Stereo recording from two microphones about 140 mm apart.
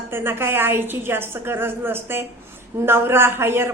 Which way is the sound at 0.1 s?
15° right (ahead or behind).